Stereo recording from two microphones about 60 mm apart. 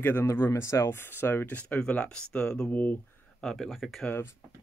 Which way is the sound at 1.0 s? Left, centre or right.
Left.